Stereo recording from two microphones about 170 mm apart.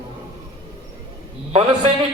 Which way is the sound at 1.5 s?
35° right (ahead or behind).